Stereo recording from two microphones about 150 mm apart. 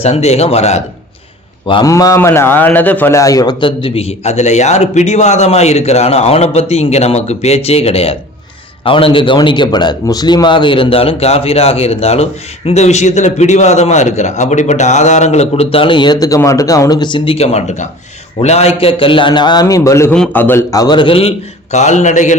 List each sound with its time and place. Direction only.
0.0 s a man's voice: 45° left (ahead or behind)
1.6 s a man's voice: 35° left (ahead or behind)
1.9 s a man's voice: 20° left (ahead or behind)
16.2 s a man's voice: 20° left (ahead or behind)
20.1 s a man's voice: 10° left (ahead or behind); by 22.4 s 55° left (ahead or behind)